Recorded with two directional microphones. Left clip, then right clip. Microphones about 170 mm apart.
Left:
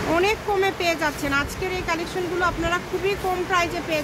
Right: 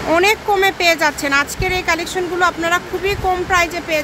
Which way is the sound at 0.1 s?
35° right (ahead or behind).